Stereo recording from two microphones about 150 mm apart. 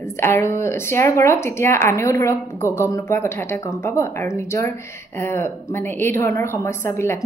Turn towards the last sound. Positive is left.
turn(degrees=15)  # may be behind; listen again after turning